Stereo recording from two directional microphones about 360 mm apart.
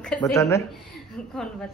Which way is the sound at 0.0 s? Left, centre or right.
Centre.